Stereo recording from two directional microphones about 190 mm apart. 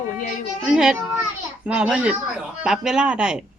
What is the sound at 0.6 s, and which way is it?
A woman's voice, 5° right (ahead or behind).